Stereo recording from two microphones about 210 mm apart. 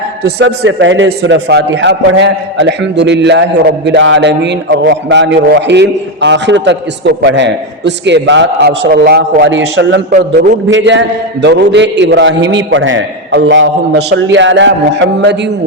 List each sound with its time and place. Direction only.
0.2 s a man's voice: 50° right (ahead or behind)